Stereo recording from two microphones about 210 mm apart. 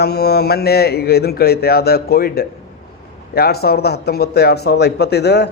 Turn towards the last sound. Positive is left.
turn(degrees=55)  # may be behind; listen again after turning